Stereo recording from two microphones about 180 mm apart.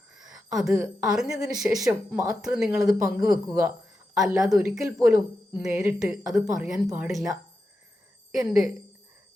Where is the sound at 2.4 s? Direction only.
Centre (ahead or behind).